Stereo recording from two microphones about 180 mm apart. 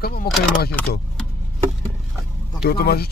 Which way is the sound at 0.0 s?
55° left (ahead or behind).